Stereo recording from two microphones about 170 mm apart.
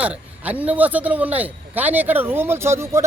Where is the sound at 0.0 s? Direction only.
10° right (ahead or behind).